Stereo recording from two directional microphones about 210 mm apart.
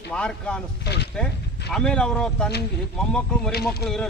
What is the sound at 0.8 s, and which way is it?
Speech, 50° left (ahead or behind).